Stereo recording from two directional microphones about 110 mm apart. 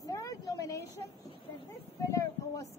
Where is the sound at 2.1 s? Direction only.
30° left (ahead or behind).